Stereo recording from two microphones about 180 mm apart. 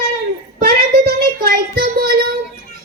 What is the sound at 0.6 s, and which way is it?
Child singing, 55° right (ahead or behind).